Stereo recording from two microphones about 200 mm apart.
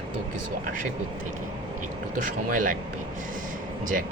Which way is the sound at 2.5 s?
40° right (ahead or behind).